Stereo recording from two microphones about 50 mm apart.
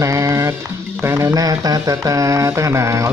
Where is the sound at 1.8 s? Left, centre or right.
Right.